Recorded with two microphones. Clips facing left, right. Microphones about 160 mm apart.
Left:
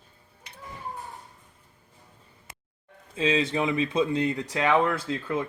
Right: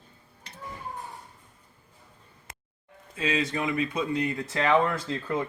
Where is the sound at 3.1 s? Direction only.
25° left (ahead or behind).